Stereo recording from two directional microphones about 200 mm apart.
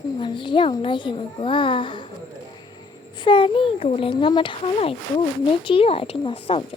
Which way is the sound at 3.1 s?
25° left (ahead or behind).